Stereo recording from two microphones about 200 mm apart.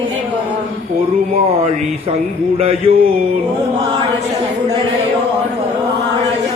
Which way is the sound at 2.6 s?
30° right (ahead or behind).